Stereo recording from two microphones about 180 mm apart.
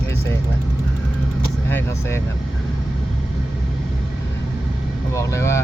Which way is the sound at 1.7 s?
10° left (ahead or behind).